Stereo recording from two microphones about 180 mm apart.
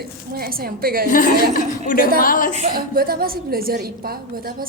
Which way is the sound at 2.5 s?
40° right (ahead or behind).